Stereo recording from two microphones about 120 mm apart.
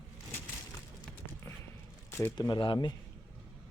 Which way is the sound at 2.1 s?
15° left (ahead or behind).